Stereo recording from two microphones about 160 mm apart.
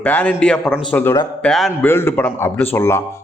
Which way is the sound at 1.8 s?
15° left (ahead or behind).